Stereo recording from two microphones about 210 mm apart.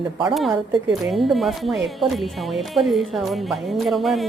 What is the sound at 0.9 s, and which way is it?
Speech, centre (ahead or behind).